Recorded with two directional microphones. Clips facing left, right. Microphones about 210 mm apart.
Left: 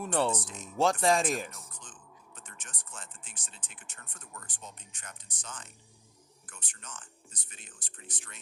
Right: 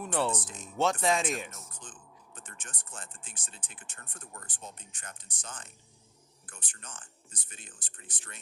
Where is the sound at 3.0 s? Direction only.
50° right (ahead or behind).